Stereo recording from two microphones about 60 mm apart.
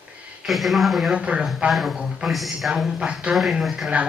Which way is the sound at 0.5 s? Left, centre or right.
Centre.